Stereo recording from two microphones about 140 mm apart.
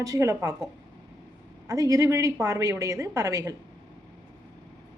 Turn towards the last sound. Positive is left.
turn(degrees=-25)  # may be behind; listen again after turning